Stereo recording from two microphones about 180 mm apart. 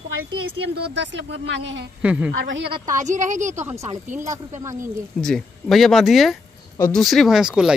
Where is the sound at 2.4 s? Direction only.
80° right.